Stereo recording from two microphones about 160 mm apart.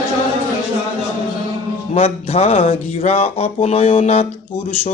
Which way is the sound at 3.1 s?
40° left (ahead or behind).